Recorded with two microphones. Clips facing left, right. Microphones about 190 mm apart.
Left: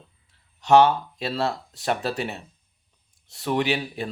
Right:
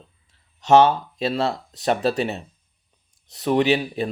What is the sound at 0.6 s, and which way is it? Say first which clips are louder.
Speech: right 2 dB; 20° right (ahead or behind).